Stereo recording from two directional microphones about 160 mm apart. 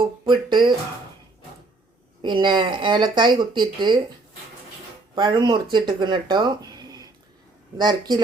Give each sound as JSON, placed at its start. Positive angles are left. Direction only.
{"t": 0.0, "sound": "speech", "side_deg": -30}
{"t": 2.2, "sound": "speech", "side_deg": -30}
{"t": 5.1, "sound": "speech", "side_deg": -30}